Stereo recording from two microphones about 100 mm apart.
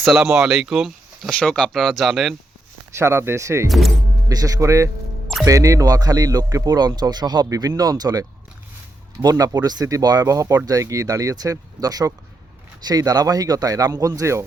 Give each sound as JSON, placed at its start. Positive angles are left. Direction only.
{"t": 0.0, "sound": "speech", "side_deg": -5}
{"t": 1.3, "sound": "speech", "side_deg": 10}
{"t": 2.9, "sound": "speech", "side_deg": -25}
{"t": 3.7, "sound": "speech", "side_deg": 0}
{"t": 4.3, "sound": "speech", "side_deg": -40}